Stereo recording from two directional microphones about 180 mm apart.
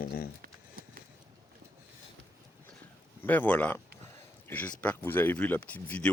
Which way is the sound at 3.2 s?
10° left (ahead or behind).